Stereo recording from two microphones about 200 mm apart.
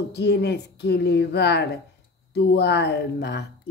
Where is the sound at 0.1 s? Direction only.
55° left (ahead or behind).